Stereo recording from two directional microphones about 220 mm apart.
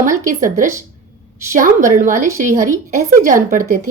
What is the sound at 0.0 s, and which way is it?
Speech, 35° right (ahead or behind).